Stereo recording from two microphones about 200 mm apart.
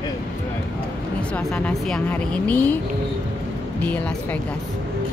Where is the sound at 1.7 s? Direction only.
5° left (ahead or behind).